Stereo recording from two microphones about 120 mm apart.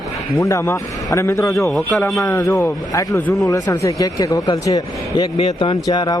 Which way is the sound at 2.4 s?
25° left (ahead or behind).